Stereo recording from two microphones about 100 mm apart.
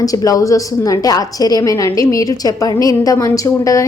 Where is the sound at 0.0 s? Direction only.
40° left (ahead or behind).